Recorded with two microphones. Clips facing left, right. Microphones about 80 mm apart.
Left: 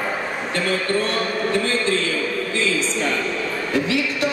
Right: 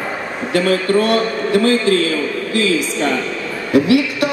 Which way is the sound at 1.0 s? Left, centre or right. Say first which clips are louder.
Right 6 dB; right.